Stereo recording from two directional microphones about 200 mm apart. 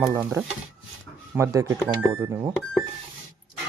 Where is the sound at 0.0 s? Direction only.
15° right (ahead or behind).